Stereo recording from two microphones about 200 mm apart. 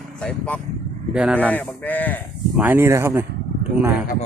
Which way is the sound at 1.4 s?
10° left (ahead or behind).